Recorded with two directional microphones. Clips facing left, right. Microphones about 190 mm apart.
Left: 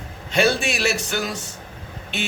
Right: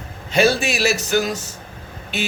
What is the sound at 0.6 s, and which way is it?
Speech, 5° right (ahead or behind).